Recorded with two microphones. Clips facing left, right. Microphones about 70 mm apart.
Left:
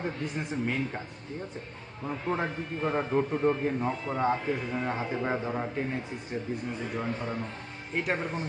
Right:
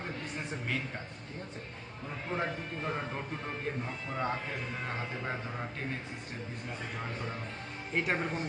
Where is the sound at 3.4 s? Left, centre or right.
Left.